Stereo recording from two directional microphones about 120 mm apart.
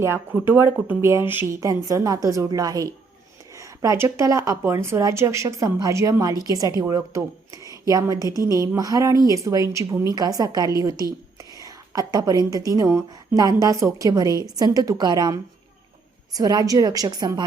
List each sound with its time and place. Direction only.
0.0 s speech: 20° right (ahead or behind)
1.6 s a woman's voice: 30° right (ahead or behind)